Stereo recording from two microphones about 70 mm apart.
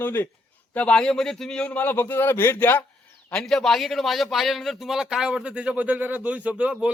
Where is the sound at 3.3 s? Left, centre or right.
Centre.